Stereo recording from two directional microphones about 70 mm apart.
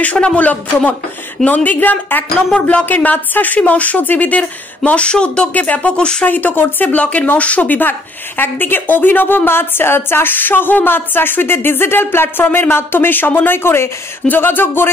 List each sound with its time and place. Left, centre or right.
0.0 s speech: centre
6.2 s a woman's voice: left